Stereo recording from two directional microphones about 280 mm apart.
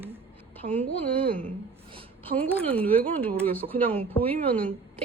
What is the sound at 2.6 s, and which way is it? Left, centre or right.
Speech, centre.